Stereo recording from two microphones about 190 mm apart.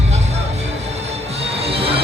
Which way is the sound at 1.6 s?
30° right (ahead or behind).